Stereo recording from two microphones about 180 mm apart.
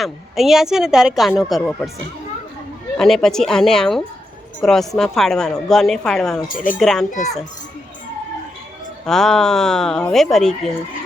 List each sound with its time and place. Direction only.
0.0 s speech: centre (ahead or behind)
3.0 s speech: 5° left (ahead or behind)
6.5 s speech: 50° left (ahead or behind)
6.7 s speech: centre (ahead or behind)
7.1 s a child's voice: 40° left (ahead or behind)
9.0 s speech: centre (ahead or behind)